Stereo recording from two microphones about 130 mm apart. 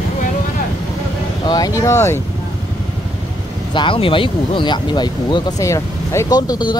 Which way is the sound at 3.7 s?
40° left (ahead or behind).